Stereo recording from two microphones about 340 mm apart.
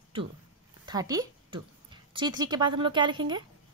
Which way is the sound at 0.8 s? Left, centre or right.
Centre.